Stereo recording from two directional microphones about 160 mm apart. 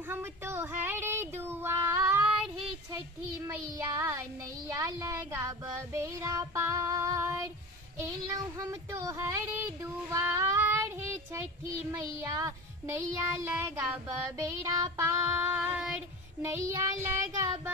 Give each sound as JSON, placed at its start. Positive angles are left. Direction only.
{"t": 0.1, "sound": "child singing", "side_deg": -15}
{"t": 3.4, "sound": "child singing", "side_deg": -20}